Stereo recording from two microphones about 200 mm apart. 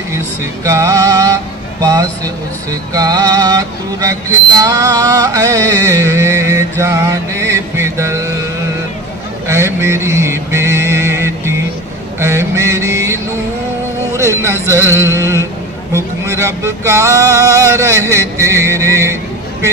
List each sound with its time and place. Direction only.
0.7 s speech: 15° right (ahead or behind)
9.5 s mantra: 15° right (ahead or behind)
14.1 s speech: 15° right (ahead or behind)
15.9 s a sound: 15° right (ahead or behind)